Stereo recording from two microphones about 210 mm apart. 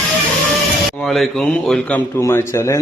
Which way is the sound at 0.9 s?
Centre (ahead or behind).